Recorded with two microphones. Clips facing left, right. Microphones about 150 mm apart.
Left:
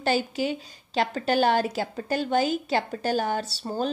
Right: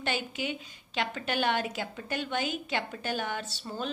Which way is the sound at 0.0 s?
35° left (ahead or behind).